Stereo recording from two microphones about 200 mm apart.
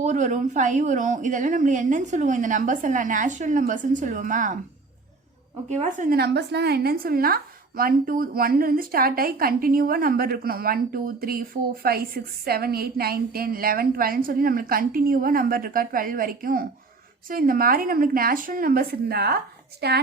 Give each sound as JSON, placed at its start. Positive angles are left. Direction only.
{"t": 0.0, "sound": "a woman's voice", "side_deg": -35}
{"t": 5.6, "sound": "a woman's voice", "side_deg": -35}
{"t": 6.1, "sound": "a woman's voice", "side_deg": -55}